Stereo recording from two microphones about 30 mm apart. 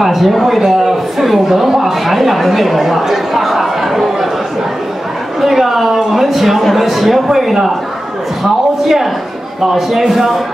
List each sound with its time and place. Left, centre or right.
0.0 s a woman's voice: centre
5.4 s a sound: centre
5.9 s speech: centre
6.2 s speech: centre
8.8 s speech: centre